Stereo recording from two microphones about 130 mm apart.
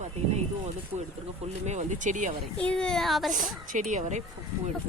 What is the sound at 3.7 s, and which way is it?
Speech, 65° right (ahead or behind).